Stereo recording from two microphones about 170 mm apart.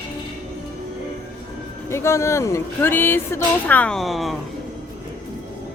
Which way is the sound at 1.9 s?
15° left (ahead or behind).